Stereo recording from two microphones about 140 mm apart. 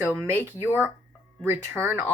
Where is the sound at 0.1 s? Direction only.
15° right (ahead or behind).